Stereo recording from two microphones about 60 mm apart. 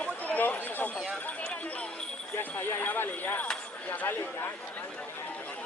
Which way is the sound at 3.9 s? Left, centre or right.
Left.